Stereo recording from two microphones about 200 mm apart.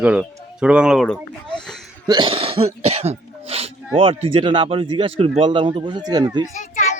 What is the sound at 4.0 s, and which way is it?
Speech, 25° right (ahead or behind).